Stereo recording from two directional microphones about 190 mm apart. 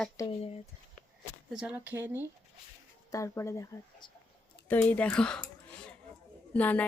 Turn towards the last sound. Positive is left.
turn(degrees=10)  # may be behind; listen again after turning